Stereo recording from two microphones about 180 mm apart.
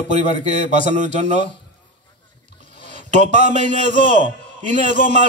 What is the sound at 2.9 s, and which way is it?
A man's voice, 40° right (ahead or behind).